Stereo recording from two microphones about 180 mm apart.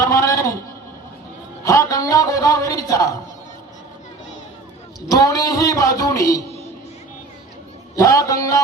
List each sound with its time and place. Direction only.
0.0 s a sound: 20° left (ahead or behind)
1.6 s a man's voice: 20° left (ahead or behind)
5.0 s speech: 20° left (ahead or behind)
7.9 s speech: 20° left (ahead or behind)